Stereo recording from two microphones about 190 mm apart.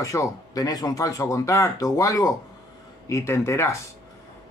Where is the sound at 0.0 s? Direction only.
15° left (ahead or behind).